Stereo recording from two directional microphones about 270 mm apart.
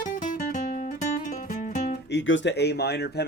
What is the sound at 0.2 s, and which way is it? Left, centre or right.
Guitar, left.